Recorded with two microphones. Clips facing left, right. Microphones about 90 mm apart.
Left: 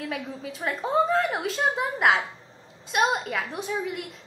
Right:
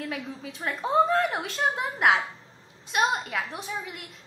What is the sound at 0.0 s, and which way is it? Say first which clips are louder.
A woman's voice: left 2 dB; centre (ahead or behind).